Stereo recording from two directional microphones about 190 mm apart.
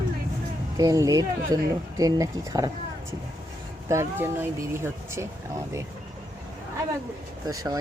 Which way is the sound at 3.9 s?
15° right (ahead or behind).